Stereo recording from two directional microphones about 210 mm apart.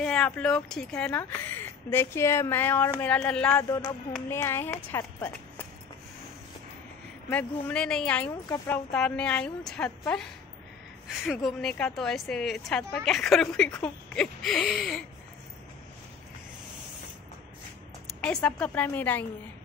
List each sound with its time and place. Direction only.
0.0 s a woman's voice: 5° left (ahead or behind)
3.6 s speech: 15° left (ahead or behind)
7.2 s a woman's voice: 5° left (ahead or behind)
18.2 s speech: 5° left (ahead or behind)